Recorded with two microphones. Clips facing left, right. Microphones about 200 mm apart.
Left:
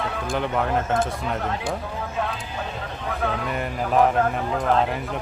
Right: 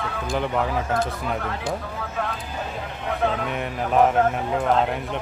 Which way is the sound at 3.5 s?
Centre (ahead or behind).